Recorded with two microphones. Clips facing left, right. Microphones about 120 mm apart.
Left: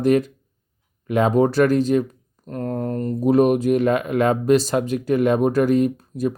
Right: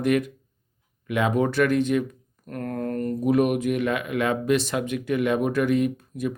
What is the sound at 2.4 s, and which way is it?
Speech, 25° left (ahead or behind).